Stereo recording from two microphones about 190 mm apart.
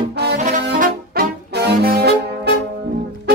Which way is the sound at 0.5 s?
45° right (ahead or behind).